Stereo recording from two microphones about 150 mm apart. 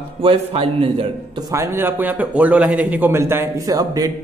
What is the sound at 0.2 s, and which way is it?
Speech, 40° right (ahead or behind).